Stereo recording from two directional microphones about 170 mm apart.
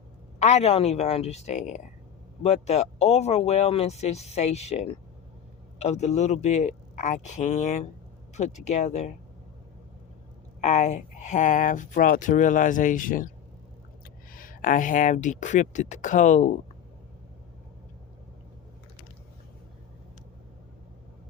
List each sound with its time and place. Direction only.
0.3 s speech: 40° left (ahead or behind)
10.6 s speech: 40° left (ahead or behind)